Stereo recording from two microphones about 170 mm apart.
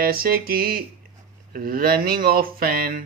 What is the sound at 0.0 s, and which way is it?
Speech, 60° right (ahead or behind).